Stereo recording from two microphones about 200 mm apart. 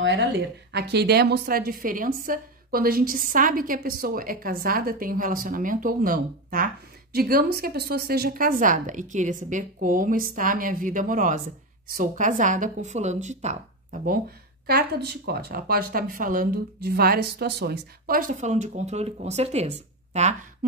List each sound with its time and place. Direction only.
0.0 s a woman's voice: 65° right (ahead or behind); by 13.6 s 35° right (ahead or behind)
14.7 s a woman's voice: 55° right (ahead or behind); by 20.3 s 35° right (ahead or behind)